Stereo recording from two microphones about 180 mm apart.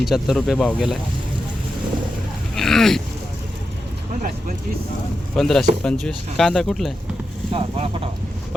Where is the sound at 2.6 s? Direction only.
Centre (ahead or behind).